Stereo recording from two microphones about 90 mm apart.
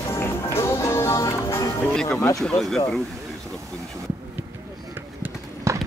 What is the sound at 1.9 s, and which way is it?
Music, 5° left (ahead or behind).